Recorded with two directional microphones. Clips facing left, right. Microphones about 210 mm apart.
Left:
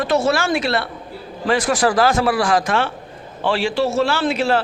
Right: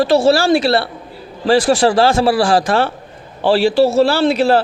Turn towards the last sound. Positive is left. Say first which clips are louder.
# right 5 dB
turn(degrees=-35)  # may be behind; listen again after turning